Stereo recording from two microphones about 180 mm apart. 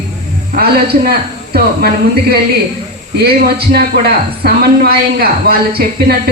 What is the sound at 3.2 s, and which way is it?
A man's voice, 60° right (ahead or behind).